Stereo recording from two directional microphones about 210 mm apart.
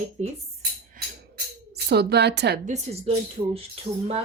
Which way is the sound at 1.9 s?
50° right (ahead or behind).